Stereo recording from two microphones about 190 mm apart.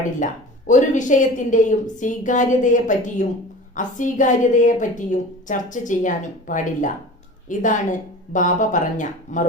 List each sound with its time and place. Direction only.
0.7 s a woman's voice: 40° left (ahead or behind)